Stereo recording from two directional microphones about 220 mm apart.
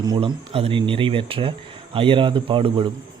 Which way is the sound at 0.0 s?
20° right (ahead or behind).